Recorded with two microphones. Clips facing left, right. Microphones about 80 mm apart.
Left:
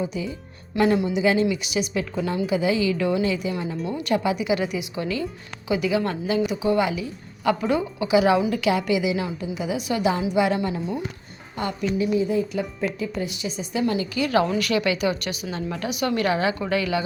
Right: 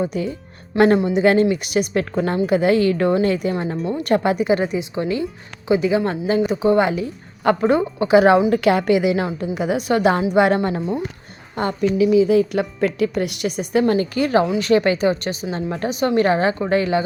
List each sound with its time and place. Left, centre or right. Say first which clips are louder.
0.0 s a woman's voice: right 5 dB; right
0.9 s a woman's voice: right 5 dB; right
1.2 s a woman's voice: right 5 dB; right
12.1 s a woman's voice: right 7 dB; right